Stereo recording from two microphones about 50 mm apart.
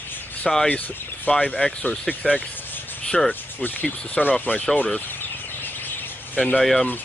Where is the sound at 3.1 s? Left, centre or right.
Centre.